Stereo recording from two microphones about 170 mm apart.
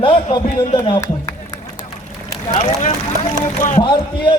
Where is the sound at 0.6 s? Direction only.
30° left (ahead or behind).